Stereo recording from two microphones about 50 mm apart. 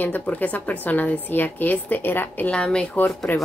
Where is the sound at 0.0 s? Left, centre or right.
Left.